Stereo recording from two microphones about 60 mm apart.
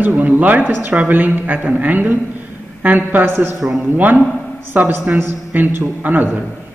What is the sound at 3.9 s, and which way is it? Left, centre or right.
A man's voice, right.